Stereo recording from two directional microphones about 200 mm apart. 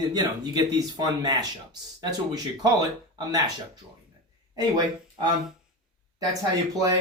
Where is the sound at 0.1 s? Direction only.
20° right (ahead or behind).